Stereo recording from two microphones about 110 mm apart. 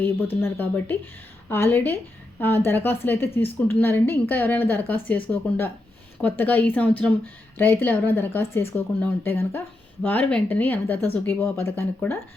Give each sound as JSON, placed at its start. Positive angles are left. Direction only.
{"t": 0.4, "sound": "a woman's voice", "side_deg": 20}